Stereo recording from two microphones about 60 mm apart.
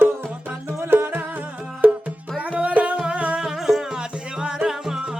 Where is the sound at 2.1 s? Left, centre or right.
Centre.